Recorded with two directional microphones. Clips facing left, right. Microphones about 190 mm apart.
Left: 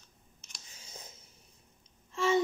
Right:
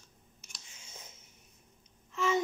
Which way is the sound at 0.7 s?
35° left (ahead or behind).